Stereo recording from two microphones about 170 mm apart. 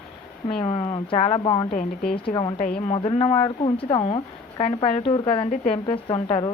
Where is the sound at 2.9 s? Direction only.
35° left (ahead or behind).